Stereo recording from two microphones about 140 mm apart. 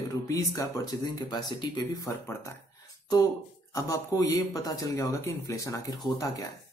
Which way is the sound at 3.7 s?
20° left (ahead or behind).